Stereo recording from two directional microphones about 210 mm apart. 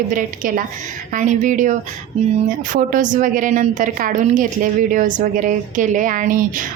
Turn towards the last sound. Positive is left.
turn(degrees=-40)  # may be behind; listen again after turning